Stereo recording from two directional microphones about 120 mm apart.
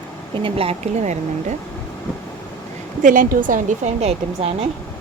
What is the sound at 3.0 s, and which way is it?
Speech, 90° right.